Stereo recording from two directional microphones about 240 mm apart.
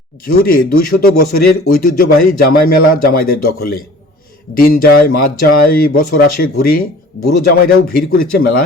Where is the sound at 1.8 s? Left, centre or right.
Left.